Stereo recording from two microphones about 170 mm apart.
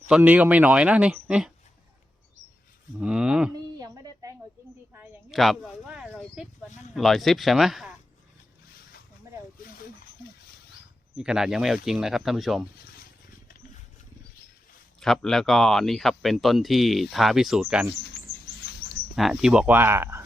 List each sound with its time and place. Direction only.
0.2 s speech: 10° right (ahead or behind)
3.0 s speech: 5° right (ahead or behind)
3.8 s a sound: 20° right (ahead or behind)
5.3 s speech: centre (ahead or behind)
11.2 s speech: 5° right (ahead or behind)
15.0 s speech: centre (ahead or behind)
19.1 s speech: centre (ahead or behind)